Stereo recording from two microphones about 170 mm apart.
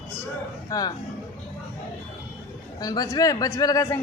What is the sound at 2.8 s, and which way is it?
A man's voice, 20° left (ahead or behind).